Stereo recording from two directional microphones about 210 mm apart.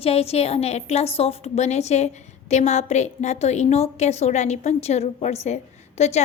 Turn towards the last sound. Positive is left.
turn(degrees=30)  # may be behind; listen again after turning